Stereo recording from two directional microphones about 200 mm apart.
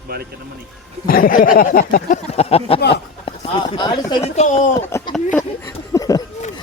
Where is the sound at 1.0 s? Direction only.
45° left (ahead or behind); by 2.8 s 30° left (ahead or behind).